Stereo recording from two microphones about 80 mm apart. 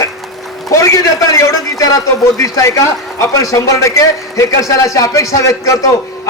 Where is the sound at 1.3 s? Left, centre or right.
Left.